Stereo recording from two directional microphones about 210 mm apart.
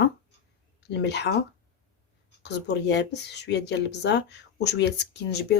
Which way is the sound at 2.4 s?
55° left (ahead or behind).